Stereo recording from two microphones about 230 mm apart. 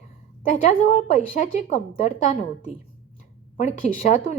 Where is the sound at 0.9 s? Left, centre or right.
Left.